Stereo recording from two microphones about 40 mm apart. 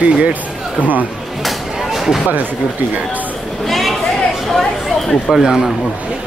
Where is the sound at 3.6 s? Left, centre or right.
Centre.